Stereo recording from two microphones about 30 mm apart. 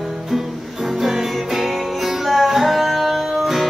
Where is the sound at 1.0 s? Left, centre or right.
Centre.